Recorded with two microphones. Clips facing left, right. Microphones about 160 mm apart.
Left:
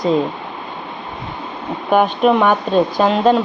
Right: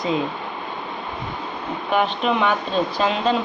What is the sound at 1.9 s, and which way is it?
Speech, 50° left (ahead or behind).